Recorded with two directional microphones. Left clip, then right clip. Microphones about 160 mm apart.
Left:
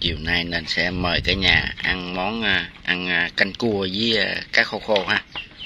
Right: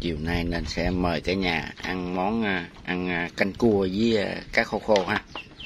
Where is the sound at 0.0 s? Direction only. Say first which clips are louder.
Left 7 dB; 20° right (ahead or behind).